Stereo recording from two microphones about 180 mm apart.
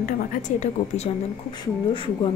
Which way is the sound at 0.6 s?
35° left (ahead or behind).